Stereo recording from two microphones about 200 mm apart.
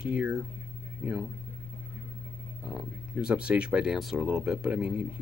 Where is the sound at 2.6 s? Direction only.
5° right (ahead or behind).